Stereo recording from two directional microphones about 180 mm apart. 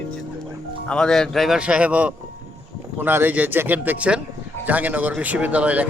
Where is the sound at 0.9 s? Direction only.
5° left (ahead or behind).